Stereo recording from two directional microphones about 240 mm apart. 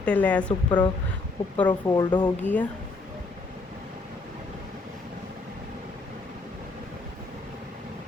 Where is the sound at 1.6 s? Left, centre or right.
Centre.